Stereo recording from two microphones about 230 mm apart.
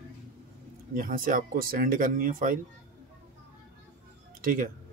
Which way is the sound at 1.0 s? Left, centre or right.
Right.